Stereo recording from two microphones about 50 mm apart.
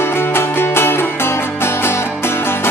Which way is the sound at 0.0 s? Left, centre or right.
Left.